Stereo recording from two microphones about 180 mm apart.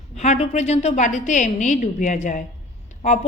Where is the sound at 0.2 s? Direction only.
40° left (ahead or behind).